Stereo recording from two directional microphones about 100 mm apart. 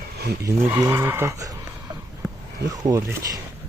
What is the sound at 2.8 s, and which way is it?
Speech, 35° right (ahead or behind).